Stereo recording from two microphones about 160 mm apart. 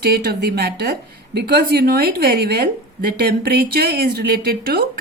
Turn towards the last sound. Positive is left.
turn(degrees=-75)  # may be behind; listen again after turning